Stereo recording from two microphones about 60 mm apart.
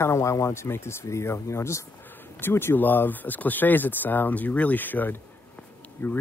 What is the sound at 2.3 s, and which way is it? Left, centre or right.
Speech, left.